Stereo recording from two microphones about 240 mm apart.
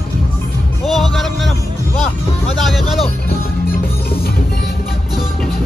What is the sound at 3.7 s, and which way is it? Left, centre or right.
Music, left.